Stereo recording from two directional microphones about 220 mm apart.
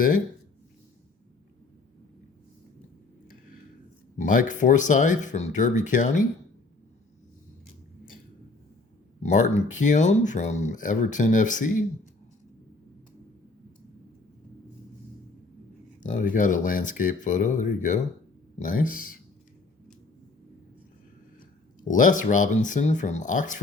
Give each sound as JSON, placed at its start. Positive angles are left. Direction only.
{"t": 4.2, "sound": "speech", "side_deg": 35}
{"t": 9.2, "sound": "speech", "side_deg": 30}
{"t": 16.0, "sound": "speech", "side_deg": 35}
{"t": 21.8, "sound": "speech", "side_deg": 35}